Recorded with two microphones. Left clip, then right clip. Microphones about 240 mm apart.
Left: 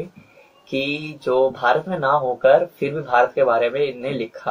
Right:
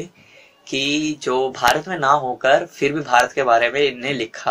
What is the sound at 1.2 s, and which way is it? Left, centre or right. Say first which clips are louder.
Speech: left 5 dB; right.